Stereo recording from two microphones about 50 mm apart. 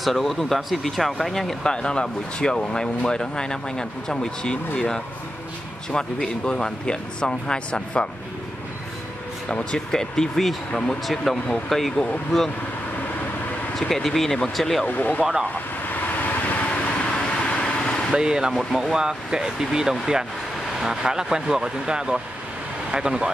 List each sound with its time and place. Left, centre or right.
0.0 s speech: centre
9.5 s speech: centre
11.3 s speech: centre
13.7 s speech: centre
14.9 s speech: left
15.9 s vehicle: left
16.8 s vehicle: left
18.1 s speech: centre
18.5 s speech: centre
18.8 s speech: centre